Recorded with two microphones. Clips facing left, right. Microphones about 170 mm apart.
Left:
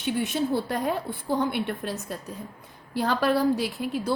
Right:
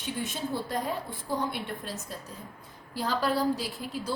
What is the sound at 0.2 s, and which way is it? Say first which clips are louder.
A woman's voice: left 6 dB; 65° left (ahead or behind).